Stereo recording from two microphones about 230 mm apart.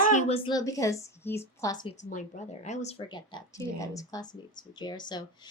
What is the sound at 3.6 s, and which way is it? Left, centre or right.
A woman's voice, centre.